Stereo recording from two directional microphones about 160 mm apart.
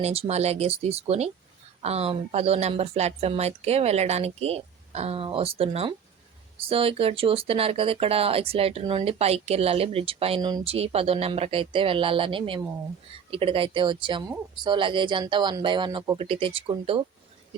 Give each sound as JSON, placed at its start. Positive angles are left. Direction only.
{"t": 0.0, "sound": "speech", "side_deg": -40}